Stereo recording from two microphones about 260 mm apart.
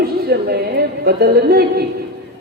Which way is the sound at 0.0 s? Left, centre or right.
Right.